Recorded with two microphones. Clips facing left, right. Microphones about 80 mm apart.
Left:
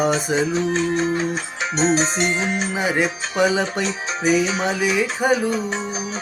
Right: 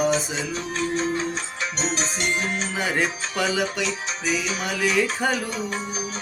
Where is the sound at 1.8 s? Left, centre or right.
Left.